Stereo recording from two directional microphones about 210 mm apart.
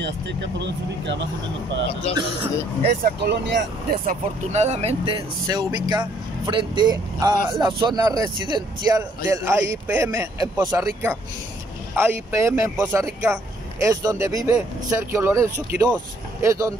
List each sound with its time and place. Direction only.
0.0 s speech: 55° right (ahead or behind)
2.1 s a man's voice: 25° left (ahead or behind)
2.8 s speech: 50° right (ahead or behind)
4.0 s a man's voice: 35° right (ahead or behind); by 16.7 s 15° right (ahead or behind)